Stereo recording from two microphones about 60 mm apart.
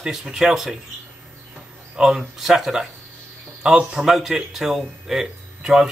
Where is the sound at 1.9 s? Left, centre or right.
Centre.